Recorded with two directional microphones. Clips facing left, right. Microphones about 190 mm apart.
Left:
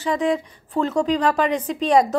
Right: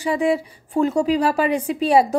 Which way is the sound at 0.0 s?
10° right (ahead or behind).